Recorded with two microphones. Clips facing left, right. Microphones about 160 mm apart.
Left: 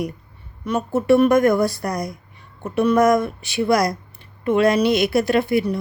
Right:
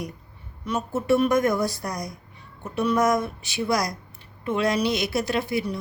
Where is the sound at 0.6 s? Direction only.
60° left (ahead or behind).